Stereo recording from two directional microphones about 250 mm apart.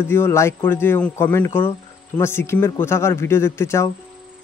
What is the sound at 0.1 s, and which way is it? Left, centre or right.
Speech, centre.